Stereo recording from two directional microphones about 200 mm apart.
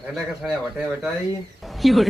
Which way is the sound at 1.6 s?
Centre (ahead or behind).